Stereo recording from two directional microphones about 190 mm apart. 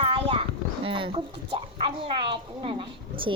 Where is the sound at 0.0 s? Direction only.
30° right (ahead or behind).